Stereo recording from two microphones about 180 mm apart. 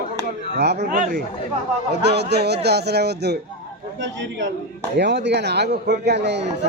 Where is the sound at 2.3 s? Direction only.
65° right (ahead or behind).